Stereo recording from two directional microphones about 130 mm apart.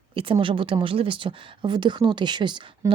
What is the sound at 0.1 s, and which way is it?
Speech, 45° right (ahead or behind).